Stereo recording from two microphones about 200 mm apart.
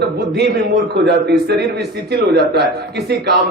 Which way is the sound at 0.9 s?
55° right (ahead or behind).